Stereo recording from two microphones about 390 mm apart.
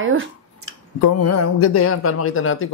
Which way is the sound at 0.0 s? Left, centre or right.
Right.